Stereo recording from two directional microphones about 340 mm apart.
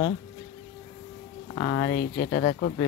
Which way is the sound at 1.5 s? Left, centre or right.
Left.